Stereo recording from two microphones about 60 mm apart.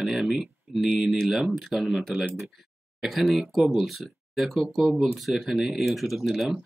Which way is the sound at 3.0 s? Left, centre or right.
Centre.